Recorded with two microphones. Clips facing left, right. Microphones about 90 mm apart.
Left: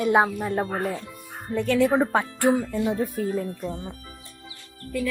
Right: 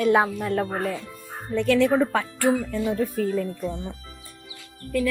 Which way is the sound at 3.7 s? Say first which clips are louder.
Right 2 dB; 25° right (ahead or behind).